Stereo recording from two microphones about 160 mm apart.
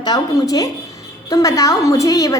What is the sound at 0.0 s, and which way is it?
A woman's voice, 25° left (ahead or behind).